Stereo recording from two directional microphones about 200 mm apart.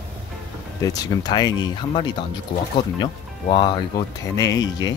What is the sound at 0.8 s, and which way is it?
Speech, 20° left (ahead or behind).